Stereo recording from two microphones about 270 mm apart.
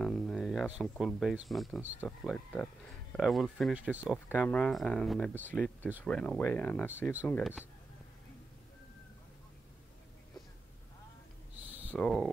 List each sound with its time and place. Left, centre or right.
0.0 s a sound: centre
1.5 s speech: centre
11.9 s speech: centre